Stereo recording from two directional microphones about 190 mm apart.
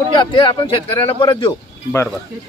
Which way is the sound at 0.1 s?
25° left (ahead or behind).